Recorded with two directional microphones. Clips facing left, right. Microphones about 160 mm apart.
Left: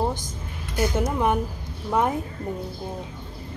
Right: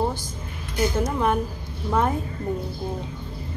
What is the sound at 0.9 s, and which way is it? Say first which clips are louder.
A woman's voice: left 1 dB; 15° left (ahead or behind).